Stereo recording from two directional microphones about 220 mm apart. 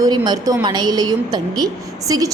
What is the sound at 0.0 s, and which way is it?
A woman's voice, 15° right (ahead or behind).